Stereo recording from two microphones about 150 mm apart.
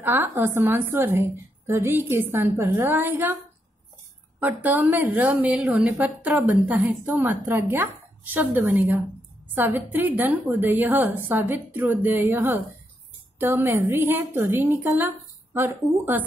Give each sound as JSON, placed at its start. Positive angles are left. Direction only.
{"t": 0.0, "sound": "a woman's voice", "side_deg": -15}
{"t": 4.4, "sound": "a woman's voice", "side_deg": -10}